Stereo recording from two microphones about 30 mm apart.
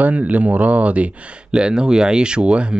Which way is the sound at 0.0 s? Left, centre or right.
Right.